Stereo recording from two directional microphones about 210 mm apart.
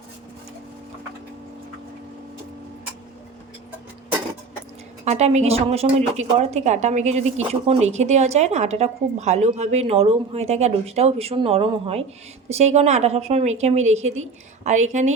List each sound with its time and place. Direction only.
5.0 s speech: 30° right (ahead or behind)